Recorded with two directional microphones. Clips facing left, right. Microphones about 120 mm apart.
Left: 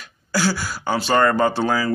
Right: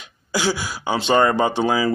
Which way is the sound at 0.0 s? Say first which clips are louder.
Even; 15° right (ahead or behind).